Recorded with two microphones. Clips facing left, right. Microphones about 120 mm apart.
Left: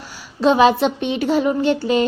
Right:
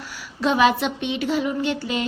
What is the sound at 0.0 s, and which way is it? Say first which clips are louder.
A woman's voice: left 6 dB; 25° left (ahead or behind).